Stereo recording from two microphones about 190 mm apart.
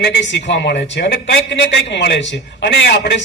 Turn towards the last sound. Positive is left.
turn(degrees=65)  # may be behind; listen again after turning